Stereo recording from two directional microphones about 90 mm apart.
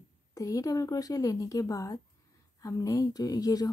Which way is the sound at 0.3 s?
40° left (ahead or behind).